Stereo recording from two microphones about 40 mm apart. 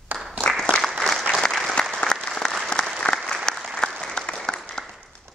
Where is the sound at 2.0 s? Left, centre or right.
Left.